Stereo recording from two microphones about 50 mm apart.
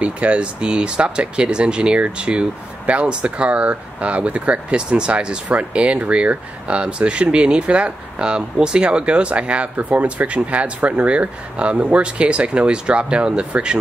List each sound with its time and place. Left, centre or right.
0.0 s speech: right